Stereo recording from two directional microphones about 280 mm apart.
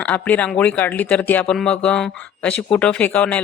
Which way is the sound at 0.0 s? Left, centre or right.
Centre.